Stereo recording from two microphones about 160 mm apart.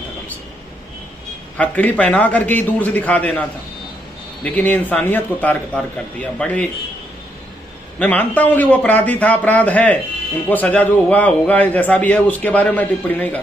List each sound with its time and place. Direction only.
1.6 s a man's voice: 10° left (ahead or behind)
8.0 s a man's voice: 10° left (ahead or behind)